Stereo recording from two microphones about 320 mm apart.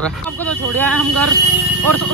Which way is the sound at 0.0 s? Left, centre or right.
Centre.